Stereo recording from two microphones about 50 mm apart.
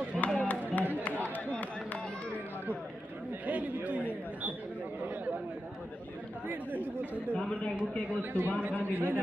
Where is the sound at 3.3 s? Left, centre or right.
Right.